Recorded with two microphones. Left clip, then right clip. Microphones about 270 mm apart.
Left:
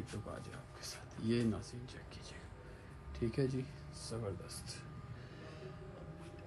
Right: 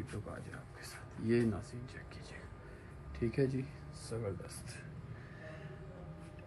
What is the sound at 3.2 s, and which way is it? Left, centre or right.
Speech, centre.